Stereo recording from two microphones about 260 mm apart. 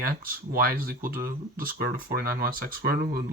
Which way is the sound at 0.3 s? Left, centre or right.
Right.